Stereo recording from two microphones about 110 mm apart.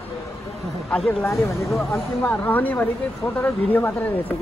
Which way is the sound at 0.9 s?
10° left (ahead or behind).